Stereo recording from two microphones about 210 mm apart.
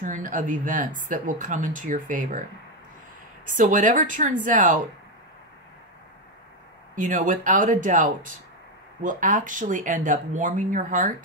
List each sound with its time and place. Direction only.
0.0 s speech: 40° right (ahead or behind)
3.4 s speech: 40° right (ahead or behind)
7.0 s speech: 40° right (ahead or behind)